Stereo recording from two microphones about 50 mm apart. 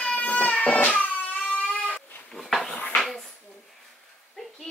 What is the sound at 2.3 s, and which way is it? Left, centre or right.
Dog, centre.